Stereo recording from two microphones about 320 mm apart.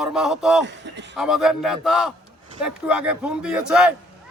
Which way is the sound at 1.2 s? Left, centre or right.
Centre.